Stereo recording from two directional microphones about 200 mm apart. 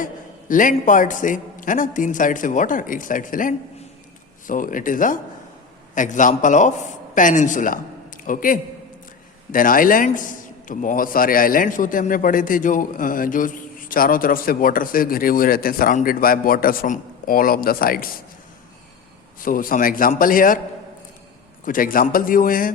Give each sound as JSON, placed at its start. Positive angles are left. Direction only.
{"t": 0.0, "sound": "a man's voice", "side_deg": 40}
{"t": 19.4, "sound": "a man's voice", "side_deg": 45}
{"t": 21.6, "sound": "a man's voice", "side_deg": 45}